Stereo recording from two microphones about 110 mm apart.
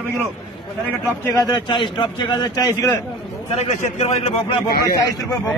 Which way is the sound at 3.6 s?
85° left.